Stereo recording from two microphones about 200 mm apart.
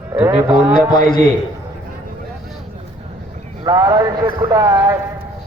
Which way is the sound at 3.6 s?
20° right (ahead or behind).